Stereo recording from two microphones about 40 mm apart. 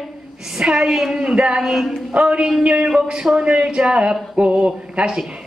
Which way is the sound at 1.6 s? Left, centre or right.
Centre.